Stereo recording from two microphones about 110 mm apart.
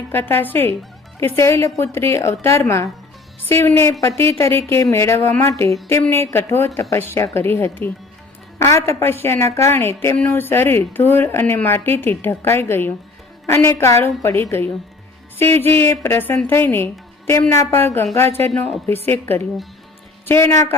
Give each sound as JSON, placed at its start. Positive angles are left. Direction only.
{"t": 0.1, "sound": "a woman's voice", "side_deg": 20}